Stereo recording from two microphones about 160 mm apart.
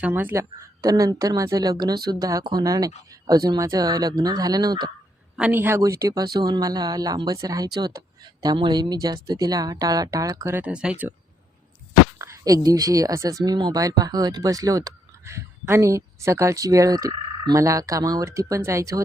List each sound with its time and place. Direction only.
0.0 s speech: 10° right (ahead or behind)
5.4 s speech: 10° right (ahead or behind)
12.2 s a sound: 20° right (ahead or behind)
12.6 s speech: 25° right (ahead or behind)